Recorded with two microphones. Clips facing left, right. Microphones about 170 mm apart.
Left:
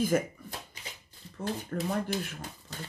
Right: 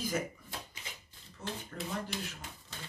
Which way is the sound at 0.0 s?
50° left (ahead or behind).